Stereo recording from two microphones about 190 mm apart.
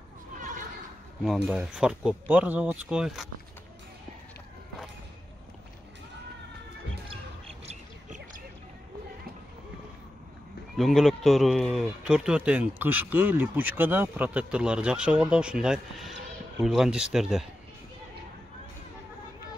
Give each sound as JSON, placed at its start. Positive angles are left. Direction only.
{"t": 0.4, "sound": "a sound", "side_deg": -40}
{"t": 1.2, "sound": "a man's voice", "side_deg": 0}
{"t": 7.1, "sound": "basketball bounce", "side_deg": -30}
{"t": 10.8, "sound": "a man's voice", "side_deg": 0}